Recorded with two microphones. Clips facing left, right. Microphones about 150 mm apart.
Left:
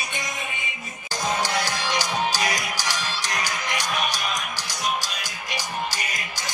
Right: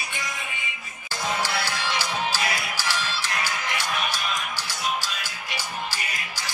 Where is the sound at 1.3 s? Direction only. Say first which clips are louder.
Left 2 dB; 15° left (ahead or behind).